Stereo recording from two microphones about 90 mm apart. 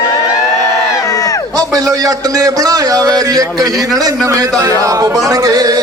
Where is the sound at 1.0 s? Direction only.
40° left (ahead or behind).